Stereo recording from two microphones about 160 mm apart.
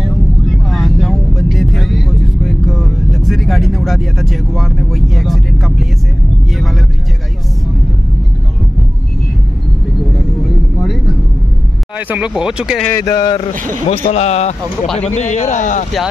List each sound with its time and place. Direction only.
0.0 s vehicle: centre (ahead or behind)
10.8 s vehicle: centre (ahead or behind)
12.1 s speech: 5° right (ahead or behind)
12.8 s speech: 20° left (ahead or behind)
14.1 s speech: 45° left (ahead or behind)